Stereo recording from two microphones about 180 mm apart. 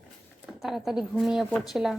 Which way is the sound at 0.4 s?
Centre (ahead or behind).